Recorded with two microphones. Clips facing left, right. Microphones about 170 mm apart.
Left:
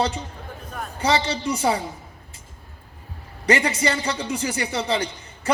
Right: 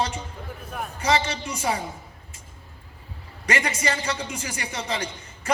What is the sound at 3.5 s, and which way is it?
A man's voice, 30° left (ahead or behind).